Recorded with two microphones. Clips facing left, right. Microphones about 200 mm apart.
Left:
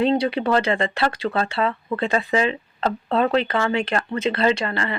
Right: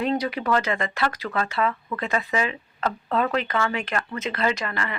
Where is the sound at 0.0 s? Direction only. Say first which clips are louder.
Left 5 dB; 30° left (ahead or behind).